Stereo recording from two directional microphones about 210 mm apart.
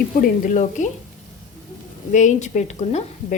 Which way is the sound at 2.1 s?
35° left (ahead or behind).